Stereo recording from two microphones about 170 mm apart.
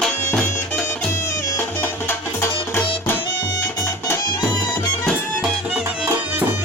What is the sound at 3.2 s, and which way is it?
Music, 25° left (ahead or behind).